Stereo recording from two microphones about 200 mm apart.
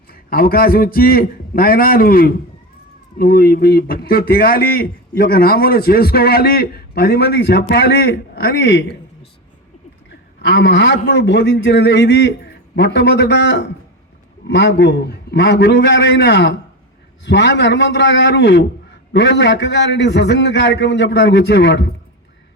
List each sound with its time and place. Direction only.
0.1 s speech: 50° left (ahead or behind)
10.1 s a man's voice: 60° left (ahead or behind)